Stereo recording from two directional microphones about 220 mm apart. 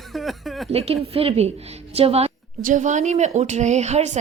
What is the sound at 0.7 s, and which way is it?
A woman's voice, 30° right (ahead or behind).